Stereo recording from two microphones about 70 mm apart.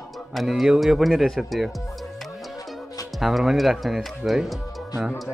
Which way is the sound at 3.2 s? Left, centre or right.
Centre.